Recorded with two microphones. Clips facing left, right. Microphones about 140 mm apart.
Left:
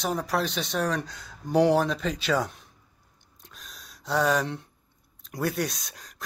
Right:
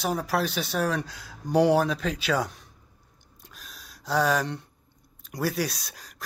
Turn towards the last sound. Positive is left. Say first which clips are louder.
# even
turn(degrees=0)  # may be behind; listen again after turning